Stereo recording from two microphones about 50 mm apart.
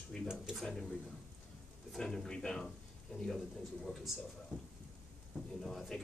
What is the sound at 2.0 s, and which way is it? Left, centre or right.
Speech, centre.